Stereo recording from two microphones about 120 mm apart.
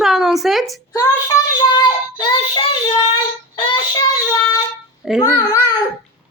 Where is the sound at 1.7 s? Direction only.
35° left (ahead or behind).